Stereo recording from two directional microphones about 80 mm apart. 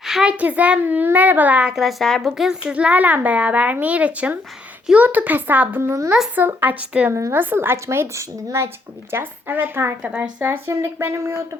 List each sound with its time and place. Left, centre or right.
0.0 s a sound: centre
0.3 s a woman's voice: centre
1.7 s a woman's voice: centre
7.1 s speech: right
10.0 s speech: centre
10.4 s speech: right